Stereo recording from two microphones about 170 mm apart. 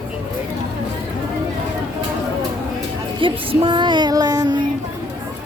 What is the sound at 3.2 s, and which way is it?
Child singing, 30° right (ahead or behind).